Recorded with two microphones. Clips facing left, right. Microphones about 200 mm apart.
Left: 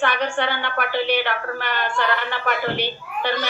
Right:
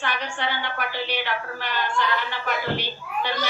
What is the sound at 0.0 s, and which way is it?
A woman's voice, 60° left (ahead or behind).